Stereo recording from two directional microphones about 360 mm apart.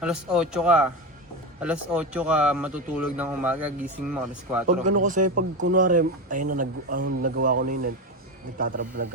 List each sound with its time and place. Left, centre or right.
0.0 s speech: centre
5.0 s speech: right